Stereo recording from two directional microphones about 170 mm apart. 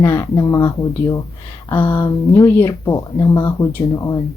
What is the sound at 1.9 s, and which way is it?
Speech, 30° left (ahead or behind).